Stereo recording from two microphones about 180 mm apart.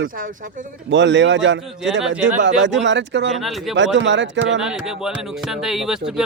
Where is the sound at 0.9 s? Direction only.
85° right.